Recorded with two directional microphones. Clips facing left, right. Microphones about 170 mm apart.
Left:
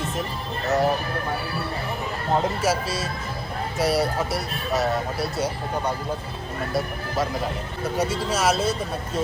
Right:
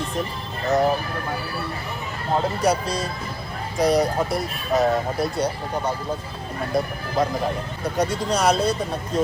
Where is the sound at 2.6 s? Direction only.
5° left (ahead or behind).